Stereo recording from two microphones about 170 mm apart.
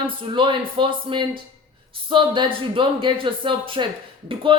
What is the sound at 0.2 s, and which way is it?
Speech, 30° right (ahead or behind).